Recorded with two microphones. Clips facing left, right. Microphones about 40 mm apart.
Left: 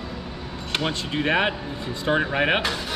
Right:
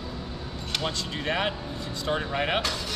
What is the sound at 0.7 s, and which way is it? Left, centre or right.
Speech, left.